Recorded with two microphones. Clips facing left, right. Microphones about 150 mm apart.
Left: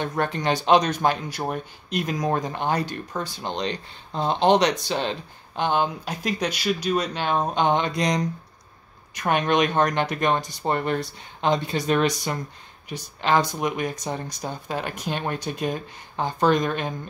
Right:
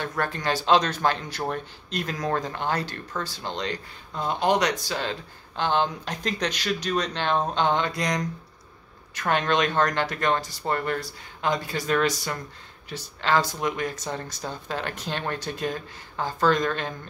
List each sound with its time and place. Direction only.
0.0 s speech: 20° left (ahead or behind)